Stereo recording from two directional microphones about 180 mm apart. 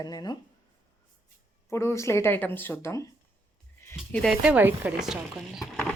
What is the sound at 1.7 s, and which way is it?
A woman's voice, 15° left (ahead or behind).